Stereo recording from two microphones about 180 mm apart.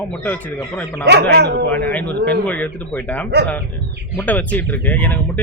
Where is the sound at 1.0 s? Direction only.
65° right (ahead or behind).